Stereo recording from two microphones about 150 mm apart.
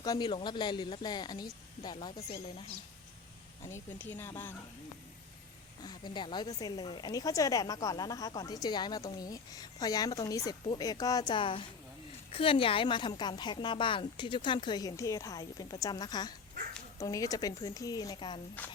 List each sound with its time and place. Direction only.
0.0 s speech: 25° left (ahead or behind)
3.6 s speech: 15° left (ahead or behind)
5.8 s a woman's voice: 30° left (ahead or behind)